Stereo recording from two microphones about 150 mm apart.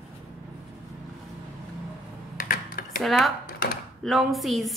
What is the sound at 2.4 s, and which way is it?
Computer keyboard, 70° left (ahead or behind).